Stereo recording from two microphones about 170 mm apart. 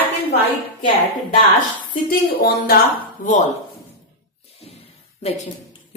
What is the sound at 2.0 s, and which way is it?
A woman's voice, 60° left (ahead or behind).